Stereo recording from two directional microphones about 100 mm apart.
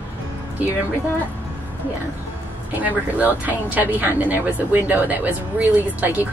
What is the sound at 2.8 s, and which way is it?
A woman's voice, 15° right (ahead or behind).